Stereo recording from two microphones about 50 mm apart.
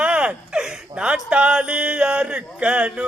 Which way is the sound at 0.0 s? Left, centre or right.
Right.